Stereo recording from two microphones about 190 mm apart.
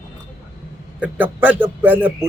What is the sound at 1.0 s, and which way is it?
A man's voice, 10° right (ahead or behind).